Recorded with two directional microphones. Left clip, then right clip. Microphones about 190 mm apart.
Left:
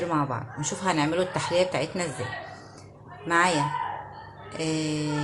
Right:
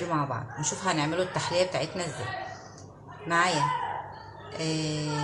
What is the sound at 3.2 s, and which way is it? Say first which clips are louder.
Speech: left 3 dB; 35° left (ahead or behind).